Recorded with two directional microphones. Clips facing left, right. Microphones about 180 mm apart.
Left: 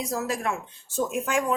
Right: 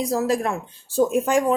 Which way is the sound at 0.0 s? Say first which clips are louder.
Right 7 dB; 35° right (ahead or behind).